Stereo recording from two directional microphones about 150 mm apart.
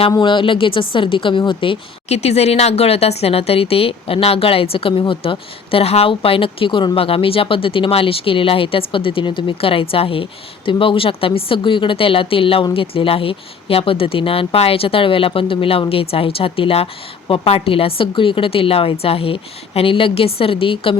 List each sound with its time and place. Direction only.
0.1 s speech: 30° left (ahead or behind)